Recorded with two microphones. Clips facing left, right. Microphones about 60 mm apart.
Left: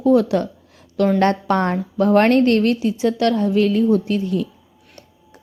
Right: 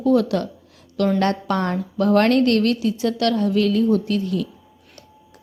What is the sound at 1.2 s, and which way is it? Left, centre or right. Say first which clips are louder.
A woman's voice: left 4 dB; left.